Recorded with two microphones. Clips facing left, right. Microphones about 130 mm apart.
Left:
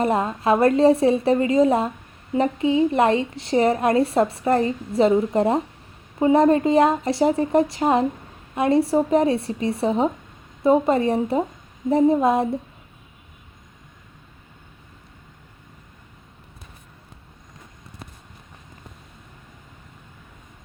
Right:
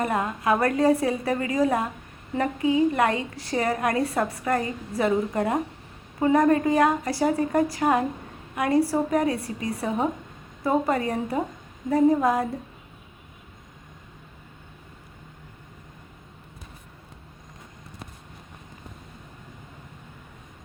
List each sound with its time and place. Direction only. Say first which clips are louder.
0.0 s a woman's voice: left 4 dB; 25° left (ahead or behind)